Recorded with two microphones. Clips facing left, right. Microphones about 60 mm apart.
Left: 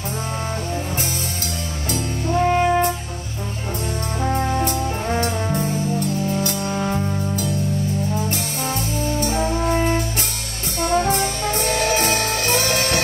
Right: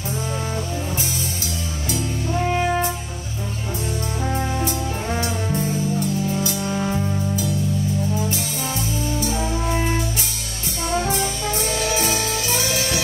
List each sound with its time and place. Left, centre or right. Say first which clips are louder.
2.3 s brass instrument: left 4 dB; centre
4.2 s music: left 4 dB; centre
6.4 s music: left 1 dB; left
6.8 s music: left 1 dB; centre
7.3 s music: even; left
10.8 s music: left 4 dB; left